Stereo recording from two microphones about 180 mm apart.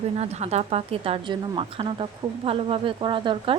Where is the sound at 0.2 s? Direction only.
35° right (ahead or behind).